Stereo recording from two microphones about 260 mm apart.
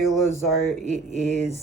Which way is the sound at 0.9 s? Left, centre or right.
Right.